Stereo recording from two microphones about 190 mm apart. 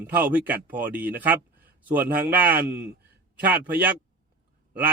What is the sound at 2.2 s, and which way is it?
Speech, 50° right (ahead or behind).